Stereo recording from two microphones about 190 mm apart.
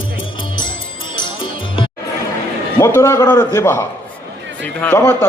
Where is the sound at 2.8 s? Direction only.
15° left (ahead or behind).